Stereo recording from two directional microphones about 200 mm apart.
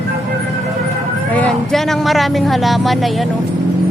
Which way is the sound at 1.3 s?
5° left (ahead or behind).